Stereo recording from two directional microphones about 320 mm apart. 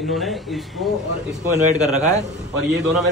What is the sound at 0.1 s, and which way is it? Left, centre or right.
Speech, centre.